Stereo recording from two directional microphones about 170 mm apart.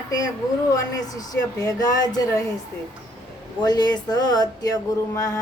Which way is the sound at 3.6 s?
25° left (ahead or behind).